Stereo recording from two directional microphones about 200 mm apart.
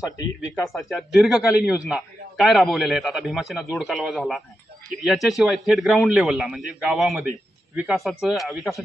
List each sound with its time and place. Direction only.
0.7 s a man's voice: centre (ahead or behind)